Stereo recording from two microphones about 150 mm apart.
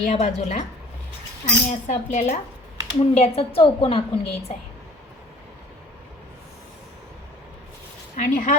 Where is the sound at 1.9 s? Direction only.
50° left (ahead or behind).